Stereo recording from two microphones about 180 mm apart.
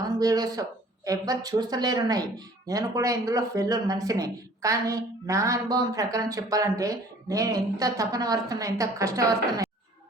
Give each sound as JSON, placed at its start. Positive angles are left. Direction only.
{"t": 0.2, "sound": "speech", "side_deg": -20}